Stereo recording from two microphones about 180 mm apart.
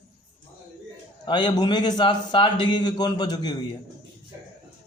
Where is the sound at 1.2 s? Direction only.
25° left (ahead or behind).